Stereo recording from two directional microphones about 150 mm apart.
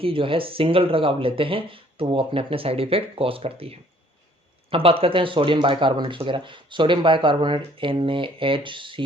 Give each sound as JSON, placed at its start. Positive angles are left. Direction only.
{"t": 0.0, "sound": "speech", "side_deg": -35}